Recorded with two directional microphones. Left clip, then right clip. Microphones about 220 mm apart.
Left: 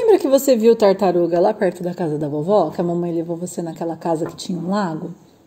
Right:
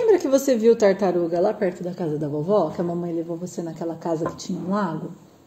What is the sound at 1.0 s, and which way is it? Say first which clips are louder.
A woman's voice: left 5 dB; 30° left (ahead or behind).